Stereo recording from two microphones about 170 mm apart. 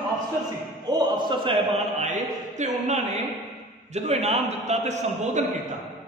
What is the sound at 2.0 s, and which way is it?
A man's voice, 45° right (ahead or behind).